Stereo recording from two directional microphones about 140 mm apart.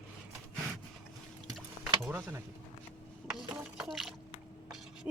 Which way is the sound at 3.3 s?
Centre (ahead or behind).